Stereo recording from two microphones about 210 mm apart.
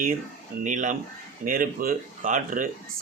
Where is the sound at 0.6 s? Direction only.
35° right (ahead or behind).